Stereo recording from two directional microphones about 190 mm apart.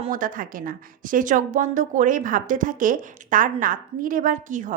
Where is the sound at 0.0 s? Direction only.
45° right (ahead or behind).